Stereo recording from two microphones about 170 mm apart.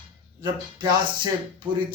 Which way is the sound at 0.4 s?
25° right (ahead or behind).